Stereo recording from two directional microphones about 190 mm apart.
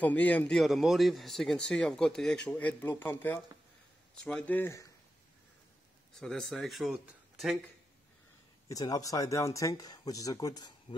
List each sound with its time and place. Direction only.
0.0 s a man's voice: 10° left (ahead or behind)
6.1 s a man's voice: 5° left (ahead or behind)
8.6 s speech: 20° left (ahead or behind)